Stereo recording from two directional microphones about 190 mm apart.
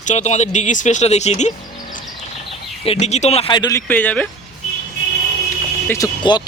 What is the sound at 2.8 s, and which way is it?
Speech, 35° left (ahead or behind).